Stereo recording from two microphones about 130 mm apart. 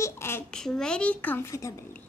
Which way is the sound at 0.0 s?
20° left (ahead or behind).